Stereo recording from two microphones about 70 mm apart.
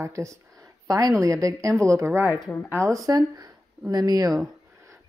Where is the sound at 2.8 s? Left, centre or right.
Right.